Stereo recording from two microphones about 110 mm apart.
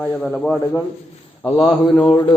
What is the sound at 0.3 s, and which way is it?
A man's voice, 5° left (ahead or behind).